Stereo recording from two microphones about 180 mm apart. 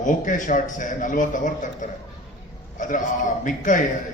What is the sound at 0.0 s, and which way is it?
A man's voice, 45° left (ahead or behind).